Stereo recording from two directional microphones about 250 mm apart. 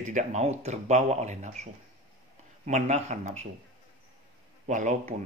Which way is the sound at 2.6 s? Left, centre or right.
Right.